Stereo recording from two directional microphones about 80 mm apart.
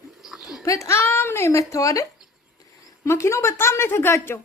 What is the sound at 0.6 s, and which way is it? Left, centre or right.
Speech, left.